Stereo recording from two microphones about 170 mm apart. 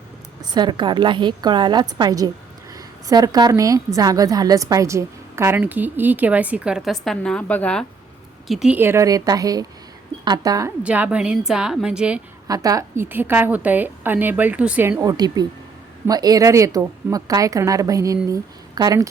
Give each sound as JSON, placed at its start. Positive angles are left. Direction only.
{"t": 0.4, "sound": "a woman's voice", "side_deg": -25}
{"t": 10.8, "sound": "a woman's voice", "side_deg": -10}
{"t": 12.5, "sound": "a woman's voice", "side_deg": -20}